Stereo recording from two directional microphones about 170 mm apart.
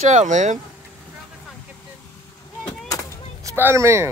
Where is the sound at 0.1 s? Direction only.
45° right (ahead or behind).